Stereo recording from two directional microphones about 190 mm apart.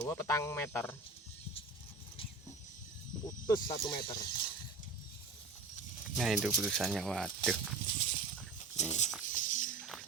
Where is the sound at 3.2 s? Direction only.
15° left (ahead or behind).